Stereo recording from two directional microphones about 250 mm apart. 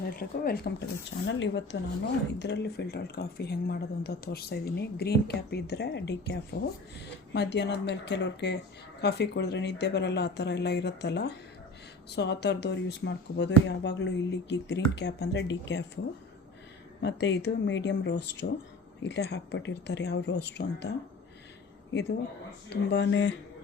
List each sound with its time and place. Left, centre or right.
0.2 s speech: left
1.3 s speech: left
17.0 s speech: left
22.7 s speech: left